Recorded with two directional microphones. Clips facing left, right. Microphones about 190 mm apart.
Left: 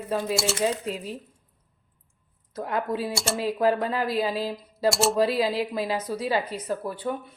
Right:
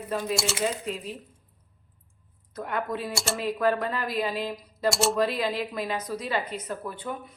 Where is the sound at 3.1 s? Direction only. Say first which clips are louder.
Left 2 dB; centre (ahead or behind).